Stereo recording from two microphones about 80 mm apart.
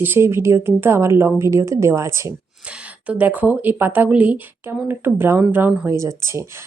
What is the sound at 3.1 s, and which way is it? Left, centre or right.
Speech, centre.